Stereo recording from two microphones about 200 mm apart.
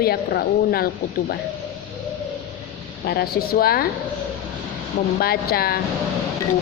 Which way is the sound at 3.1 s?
50° left (ahead or behind).